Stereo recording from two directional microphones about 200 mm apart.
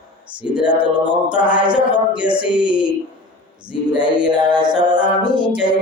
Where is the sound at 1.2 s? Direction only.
5° right (ahead or behind).